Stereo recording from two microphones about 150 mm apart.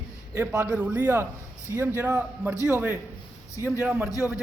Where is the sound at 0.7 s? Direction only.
10° right (ahead or behind).